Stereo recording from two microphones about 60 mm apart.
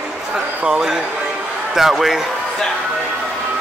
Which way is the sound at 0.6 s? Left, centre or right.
Centre.